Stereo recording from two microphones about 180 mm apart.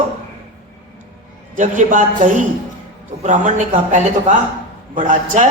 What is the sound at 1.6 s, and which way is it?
A man's voice, 45° right (ahead or behind).